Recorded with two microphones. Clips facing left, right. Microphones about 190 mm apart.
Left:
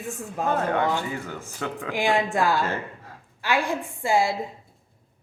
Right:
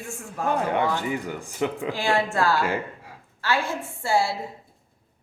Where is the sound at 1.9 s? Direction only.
15° left (ahead or behind).